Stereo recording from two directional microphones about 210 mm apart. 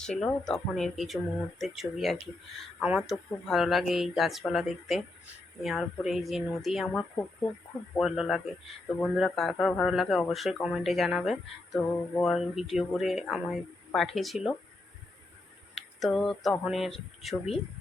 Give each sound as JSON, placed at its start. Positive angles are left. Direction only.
{"t": 0.2, "sound": "speech", "side_deg": 5}
{"t": 16.0, "sound": "speech", "side_deg": 0}